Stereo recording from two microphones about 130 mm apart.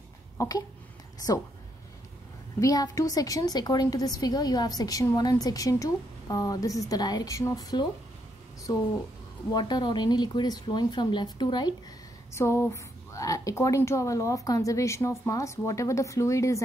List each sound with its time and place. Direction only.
0.4 s a sound: 30° left (ahead or behind)
2.6 s speech: 25° left (ahead or behind)
9.5 s speech: 30° left (ahead or behind)
12.4 s speech: 20° left (ahead or behind)